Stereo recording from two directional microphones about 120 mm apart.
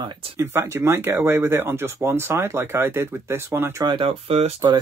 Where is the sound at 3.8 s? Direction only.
50° right (ahead or behind).